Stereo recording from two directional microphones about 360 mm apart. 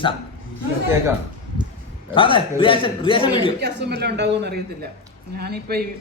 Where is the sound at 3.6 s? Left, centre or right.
Right.